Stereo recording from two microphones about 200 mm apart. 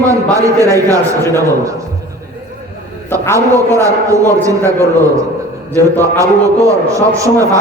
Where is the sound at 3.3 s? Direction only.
15° right (ahead or behind).